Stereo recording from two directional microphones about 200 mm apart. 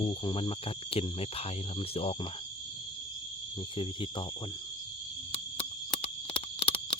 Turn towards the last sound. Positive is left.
turn(degrees=25)  # may be behind; listen again after turning